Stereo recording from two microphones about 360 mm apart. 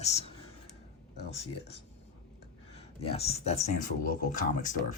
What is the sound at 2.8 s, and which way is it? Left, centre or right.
Speech, centre.